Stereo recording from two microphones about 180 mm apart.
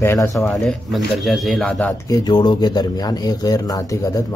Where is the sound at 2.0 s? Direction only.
20° left (ahead or behind).